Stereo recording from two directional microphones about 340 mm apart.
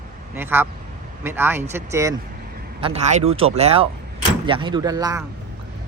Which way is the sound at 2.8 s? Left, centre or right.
Centre.